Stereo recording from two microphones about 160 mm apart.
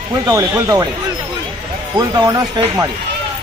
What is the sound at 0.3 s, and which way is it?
Speech, 20° right (ahead or behind).